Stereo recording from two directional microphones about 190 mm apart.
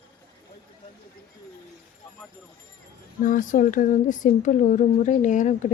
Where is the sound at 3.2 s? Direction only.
45° left (ahead or behind).